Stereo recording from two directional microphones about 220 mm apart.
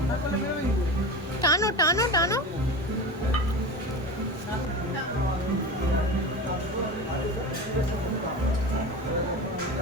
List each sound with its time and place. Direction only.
1.4 s a woman's voice: 15° left (ahead or behind)